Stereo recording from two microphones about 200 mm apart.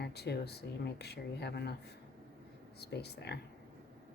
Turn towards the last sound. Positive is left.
turn(degrees=55)  # may be behind; listen again after turning